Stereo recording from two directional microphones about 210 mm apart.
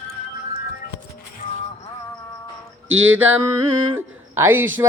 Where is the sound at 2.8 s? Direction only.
70° right (ahead or behind).